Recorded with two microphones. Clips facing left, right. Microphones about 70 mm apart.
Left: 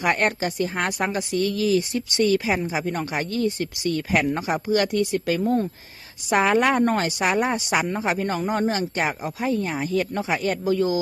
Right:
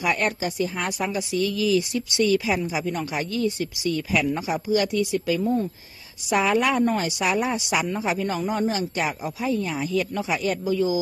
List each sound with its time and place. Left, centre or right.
0.0 s a woman's voice: left